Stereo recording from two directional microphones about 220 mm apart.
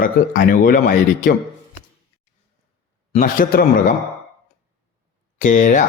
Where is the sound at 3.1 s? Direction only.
35° left (ahead or behind).